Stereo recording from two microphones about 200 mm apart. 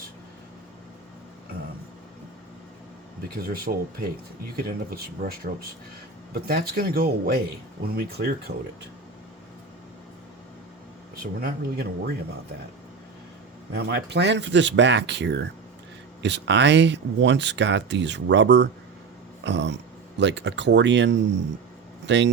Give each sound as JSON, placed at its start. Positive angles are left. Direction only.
{"t": 3.2, "sound": "speech", "side_deg": -50}
{"t": 11.2, "sound": "speech", "side_deg": -45}
{"t": 13.7, "sound": "speech", "side_deg": -55}